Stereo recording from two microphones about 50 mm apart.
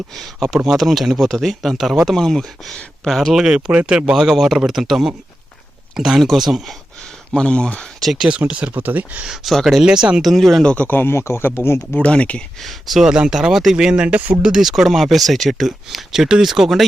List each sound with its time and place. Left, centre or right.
0.2 s speech: centre
3.3 s speech: centre
3.7 s speech: right
4.2 s speech: centre
7.3 s speech: centre
8.3 s speech: right
8.7 s speech: right
9.2 s speech: centre
10.2 s speech: centre
10.6 s speech: centre
10.8 s speech: left
11.9 s speech: left
12.6 s speech: centre
13.1 s speech: centre